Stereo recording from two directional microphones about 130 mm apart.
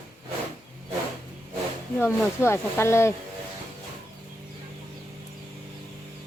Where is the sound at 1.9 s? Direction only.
20° left (ahead or behind).